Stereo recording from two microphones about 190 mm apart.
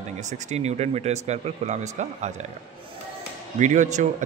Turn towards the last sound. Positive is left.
turn(degrees=-40)  # may be behind; listen again after turning